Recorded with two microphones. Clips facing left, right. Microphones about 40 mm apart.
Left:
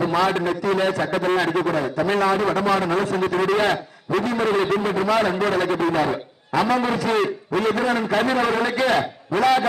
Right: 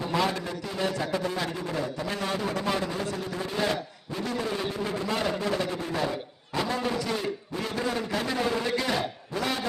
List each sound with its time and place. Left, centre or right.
0.0 s a sound: left
0.3 s a man's voice: left
0.8 s a man's voice: left
2.1 s a man's voice: left
2.8 s a man's voice: left
4.2 s a man's voice: left
5.4 s a man's voice: left
5.8 s a man's voice: left
6.7 s a man's voice: left
7.5 s a man's voice: left
7.8 s a man's voice: left
9.0 s a man's voice: left